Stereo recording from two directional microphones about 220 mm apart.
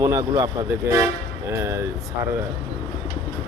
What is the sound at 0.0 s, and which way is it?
Speech, 15° right (ahead or behind).